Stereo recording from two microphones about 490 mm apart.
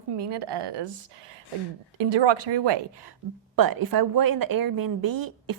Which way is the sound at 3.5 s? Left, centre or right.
Right.